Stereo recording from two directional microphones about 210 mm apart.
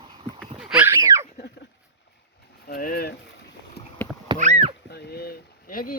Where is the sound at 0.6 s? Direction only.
5° right (ahead or behind).